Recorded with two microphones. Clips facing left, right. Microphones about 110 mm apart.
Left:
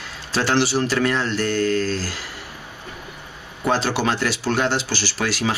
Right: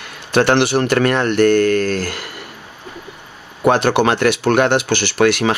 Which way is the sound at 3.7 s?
60° right (ahead or behind).